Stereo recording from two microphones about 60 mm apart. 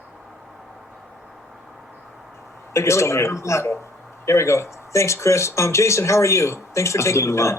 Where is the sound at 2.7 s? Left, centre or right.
Left.